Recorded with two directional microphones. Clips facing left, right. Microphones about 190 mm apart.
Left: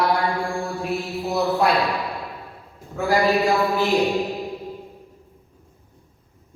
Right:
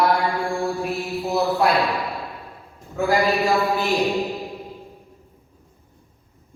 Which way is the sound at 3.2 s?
Centre (ahead or behind).